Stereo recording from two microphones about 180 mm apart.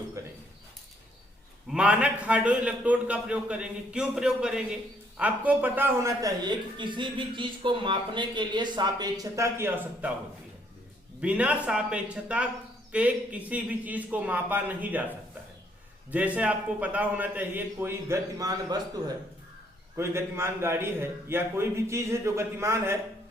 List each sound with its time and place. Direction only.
0.2 s a sound: 15° right (ahead or behind)
1.7 s a man's voice: 5° right (ahead or behind)
11.2 s a man's voice: 5° right (ahead or behind)
16.1 s a man's voice: 10° right (ahead or behind)